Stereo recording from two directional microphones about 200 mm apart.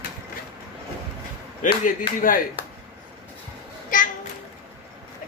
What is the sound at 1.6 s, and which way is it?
Speech, 40° left (ahead or behind).